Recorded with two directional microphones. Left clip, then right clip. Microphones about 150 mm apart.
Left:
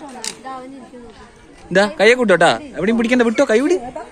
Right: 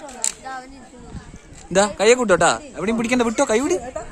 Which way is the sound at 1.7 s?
10° right (ahead or behind).